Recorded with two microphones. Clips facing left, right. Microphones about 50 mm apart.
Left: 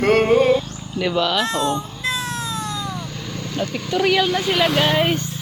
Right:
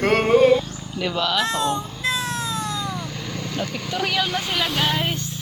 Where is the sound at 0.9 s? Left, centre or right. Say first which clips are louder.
Left 4 dB; centre.